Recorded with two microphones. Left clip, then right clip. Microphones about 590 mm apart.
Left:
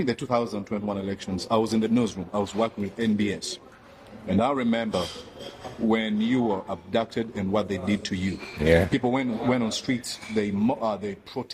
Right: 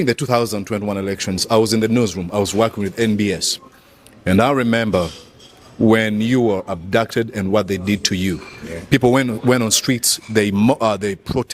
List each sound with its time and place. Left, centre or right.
0.0 s speech: right